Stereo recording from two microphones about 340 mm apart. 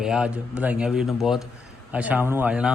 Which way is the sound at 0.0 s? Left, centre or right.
Centre.